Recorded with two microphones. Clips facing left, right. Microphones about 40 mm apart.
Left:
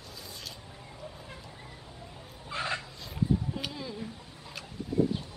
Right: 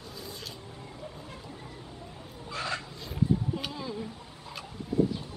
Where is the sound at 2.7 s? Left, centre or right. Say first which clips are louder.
Right 2 dB; centre.